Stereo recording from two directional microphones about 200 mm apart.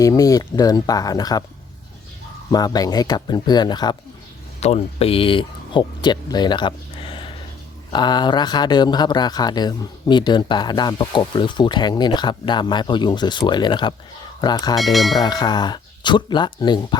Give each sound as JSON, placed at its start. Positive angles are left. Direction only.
{"t": 0.0, "sound": "speech", "side_deg": 15}
{"t": 2.5, "sound": "speech", "side_deg": 20}
{"t": 4.6, "sound": "speech", "side_deg": 30}
{"t": 14.8, "sound": "speech", "side_deg": 0}
{"t": 15.2, "sound": "speech", "side_deg": 20}